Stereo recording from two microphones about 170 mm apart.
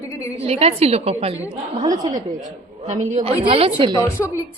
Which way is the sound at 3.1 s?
45° right (ahead or behind).